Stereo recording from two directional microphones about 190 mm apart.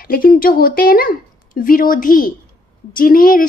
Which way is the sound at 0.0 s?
50° left (ahead or behind).